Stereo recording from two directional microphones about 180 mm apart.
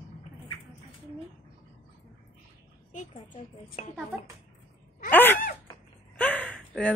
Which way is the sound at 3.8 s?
40° left (ahead or behind).